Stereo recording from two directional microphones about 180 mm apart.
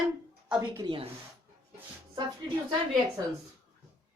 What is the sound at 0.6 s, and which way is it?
Speech, 25° right (ahead or behind).